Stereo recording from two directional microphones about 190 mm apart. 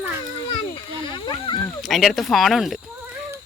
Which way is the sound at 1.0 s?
25° left (ahead or behind).